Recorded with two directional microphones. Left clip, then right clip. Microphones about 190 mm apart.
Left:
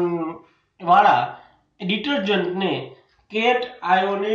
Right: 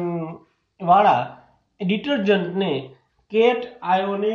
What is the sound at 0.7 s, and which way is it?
A man's voice, 25° right (ahead or behind).